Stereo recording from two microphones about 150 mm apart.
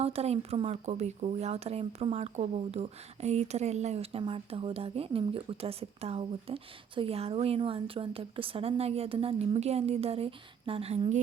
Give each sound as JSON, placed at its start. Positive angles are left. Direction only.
{"t": 0.0, "sound": "speech", "side_deg": -40}